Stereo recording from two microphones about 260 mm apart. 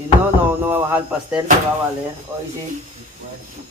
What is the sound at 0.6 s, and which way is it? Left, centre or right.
Speech, centre.